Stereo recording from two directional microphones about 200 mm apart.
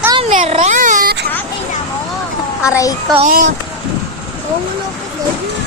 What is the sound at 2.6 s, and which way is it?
Speech, 15° left (ahead or behind).